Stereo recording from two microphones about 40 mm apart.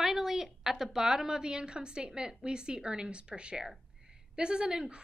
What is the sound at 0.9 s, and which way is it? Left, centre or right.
A woman's voice, centre.